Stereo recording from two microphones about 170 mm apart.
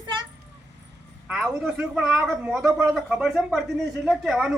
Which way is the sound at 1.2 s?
Centre (ahead or behind).